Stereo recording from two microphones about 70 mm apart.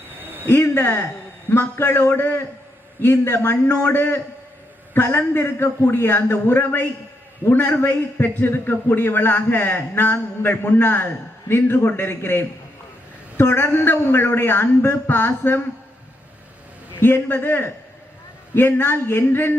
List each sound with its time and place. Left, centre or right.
0.2 s a sound: right
0.4 s a man's voice: left
17.0 s a man's voice: left